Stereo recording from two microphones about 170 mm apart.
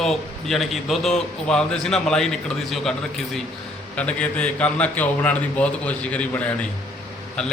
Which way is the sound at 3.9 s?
5° left (ahead or behind).